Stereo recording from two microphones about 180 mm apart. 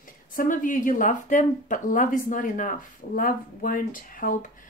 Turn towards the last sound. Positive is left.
turn(degrees=50)  # may be behind; listen again after turning